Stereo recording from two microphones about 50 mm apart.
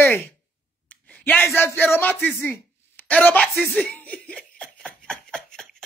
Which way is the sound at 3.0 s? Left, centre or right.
Left.